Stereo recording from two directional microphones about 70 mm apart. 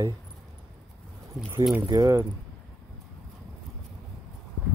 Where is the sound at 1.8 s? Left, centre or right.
Right.